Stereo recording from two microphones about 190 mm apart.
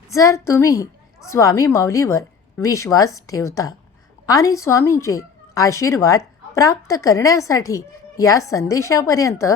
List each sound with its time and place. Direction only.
0.1 s speech: 15° left (ahead or behind)